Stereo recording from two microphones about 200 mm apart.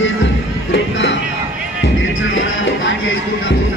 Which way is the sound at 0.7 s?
60° left (ahead or behind).